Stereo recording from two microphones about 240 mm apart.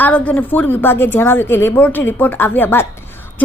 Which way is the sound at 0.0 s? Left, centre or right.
Centre.